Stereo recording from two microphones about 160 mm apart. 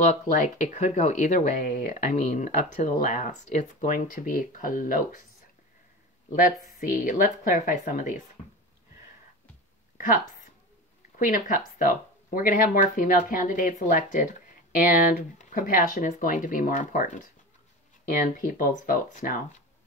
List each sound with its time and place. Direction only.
0.1 s speech: 45° left (ahead or behind)
6.3 s speech: 60° left (ahead or behind)
11.1 s speech: 60° left (ahead or behind)